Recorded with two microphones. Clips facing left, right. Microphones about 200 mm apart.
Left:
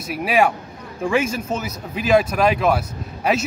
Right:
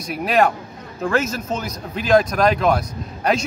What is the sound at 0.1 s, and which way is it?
Speech, 5° left (ahead or behind).